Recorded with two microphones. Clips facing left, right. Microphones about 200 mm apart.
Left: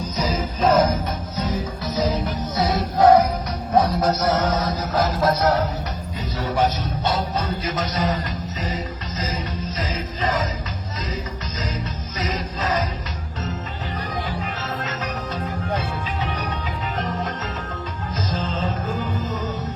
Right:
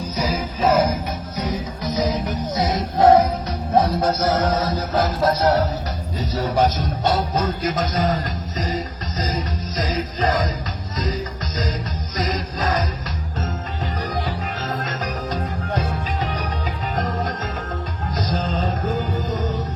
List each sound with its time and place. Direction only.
0.2 s music: 10° right (ahead or behind); by 10.5 s 40° right (ahead or behind)
12.1 s music: 40° right (ahead or behind)
15.7 s music: 40° right (ahead or behind)
18.3 s music: 40° right (ahead or behind)